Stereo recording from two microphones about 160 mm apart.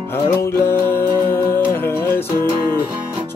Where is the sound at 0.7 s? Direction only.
15° left (ahead or behind).